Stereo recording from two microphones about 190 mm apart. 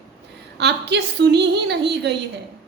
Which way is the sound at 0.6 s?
65° right (ahead or behind).